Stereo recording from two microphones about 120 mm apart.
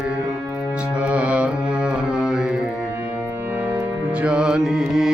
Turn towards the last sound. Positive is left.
turn(degrees=-5)  # may be behind; listen again after turning